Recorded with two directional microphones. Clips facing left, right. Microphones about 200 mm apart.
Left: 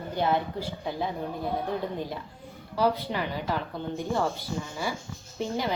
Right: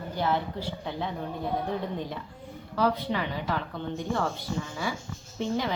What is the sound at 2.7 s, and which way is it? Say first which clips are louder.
A woman's voice: even; 10° left (ahead or behind).